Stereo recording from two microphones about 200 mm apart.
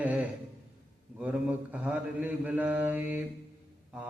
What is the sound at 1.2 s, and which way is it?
Mantra, 5° right (ahead or behind).